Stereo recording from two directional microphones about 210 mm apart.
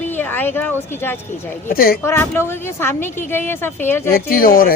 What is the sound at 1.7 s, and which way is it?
Speech, 45° left (ahead or behind).